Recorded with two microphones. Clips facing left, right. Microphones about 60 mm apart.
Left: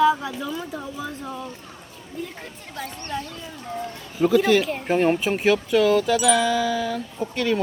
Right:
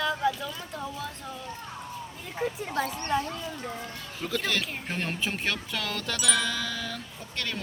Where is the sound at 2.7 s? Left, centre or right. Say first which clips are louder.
Left 1 dB; right.